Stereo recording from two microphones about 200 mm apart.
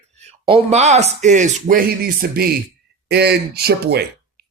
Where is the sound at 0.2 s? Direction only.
30° right (ahead or behind).